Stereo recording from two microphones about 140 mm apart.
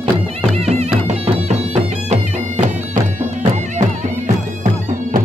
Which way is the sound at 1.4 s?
50° right (ahead or behind).